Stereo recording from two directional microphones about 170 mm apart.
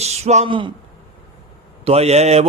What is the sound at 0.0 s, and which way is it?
Speech, 40° right (ahead or behind).